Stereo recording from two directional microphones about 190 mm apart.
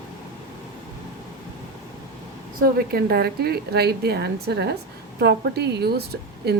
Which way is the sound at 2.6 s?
55° right (ahead or behind).